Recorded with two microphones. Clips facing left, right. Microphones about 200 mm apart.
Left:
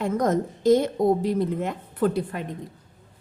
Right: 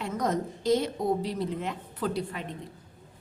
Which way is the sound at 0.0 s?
50° left (ahead or behind).